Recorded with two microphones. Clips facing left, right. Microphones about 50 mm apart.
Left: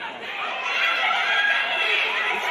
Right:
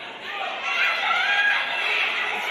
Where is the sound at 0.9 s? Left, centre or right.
Left.